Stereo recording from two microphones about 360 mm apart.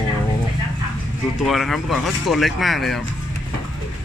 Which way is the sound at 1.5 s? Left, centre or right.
Centre.